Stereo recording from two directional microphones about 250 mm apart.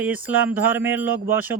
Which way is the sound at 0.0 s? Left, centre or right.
Centre.